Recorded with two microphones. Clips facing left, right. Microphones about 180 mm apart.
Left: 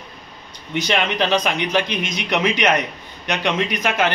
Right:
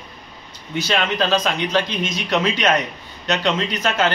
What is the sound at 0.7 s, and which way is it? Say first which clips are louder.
A man's voice: left 1 dB; 20° left (ahead or behind).